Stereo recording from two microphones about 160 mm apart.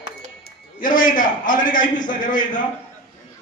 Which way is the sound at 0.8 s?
60° left (ahead or behind).